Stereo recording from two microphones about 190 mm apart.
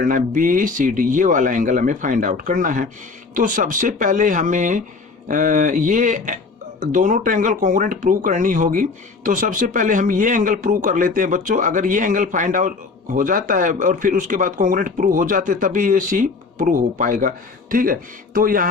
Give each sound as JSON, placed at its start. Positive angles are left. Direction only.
{"t": 0.0, "sound": "speech", "side_deg": -45}